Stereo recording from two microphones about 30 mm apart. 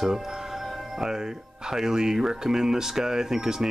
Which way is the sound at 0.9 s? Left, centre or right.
Centre.